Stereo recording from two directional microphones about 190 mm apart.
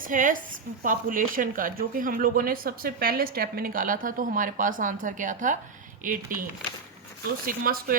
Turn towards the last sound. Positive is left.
turn(degrees=-50)  # may be behind; listen again after turning